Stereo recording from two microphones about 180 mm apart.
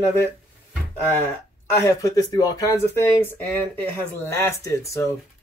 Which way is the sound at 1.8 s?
20° left (ahead or behind).